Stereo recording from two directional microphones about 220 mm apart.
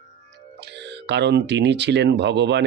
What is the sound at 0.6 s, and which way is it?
Speech, 50° right (ahead or behind).